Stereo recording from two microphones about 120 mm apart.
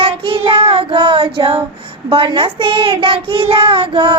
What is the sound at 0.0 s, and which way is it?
Child singing, 50° right (ahead or behind).